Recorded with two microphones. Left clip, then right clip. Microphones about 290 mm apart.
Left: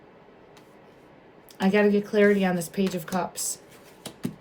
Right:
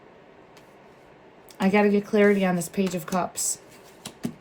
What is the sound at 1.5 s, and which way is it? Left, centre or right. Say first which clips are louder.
Speech: even; right.